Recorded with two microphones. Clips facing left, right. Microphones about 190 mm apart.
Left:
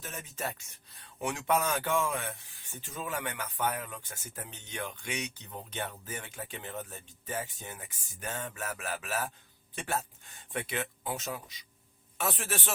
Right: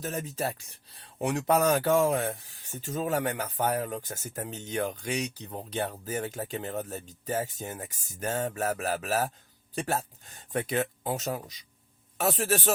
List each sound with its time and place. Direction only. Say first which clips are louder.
0.0 s speech: right 7 dB; 40° right (ahead or behind)